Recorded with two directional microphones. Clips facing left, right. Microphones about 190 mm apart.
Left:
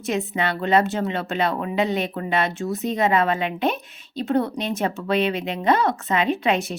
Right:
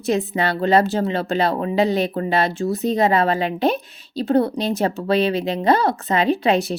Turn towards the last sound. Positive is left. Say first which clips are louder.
# right 4 dB
turn(degrees=-35)  # may be behind; listen again after turning